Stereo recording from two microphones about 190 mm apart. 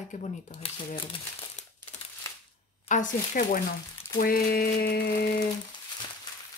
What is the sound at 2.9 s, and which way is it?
Speech, 45° left (ahead or behind).